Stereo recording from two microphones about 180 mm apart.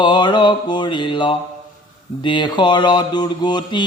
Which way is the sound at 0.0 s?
25° left (ahead or behind).